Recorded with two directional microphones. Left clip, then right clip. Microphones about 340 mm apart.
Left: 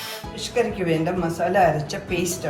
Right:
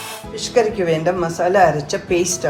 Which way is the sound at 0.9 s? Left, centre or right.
Centre.